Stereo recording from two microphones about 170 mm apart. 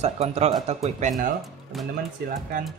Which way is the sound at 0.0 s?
40° right (ahead or behind).